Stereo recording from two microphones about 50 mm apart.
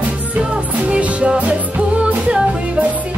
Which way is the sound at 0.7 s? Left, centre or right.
Right.